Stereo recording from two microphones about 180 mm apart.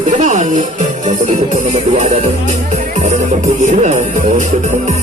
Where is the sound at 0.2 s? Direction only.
45° right (ahead or behind).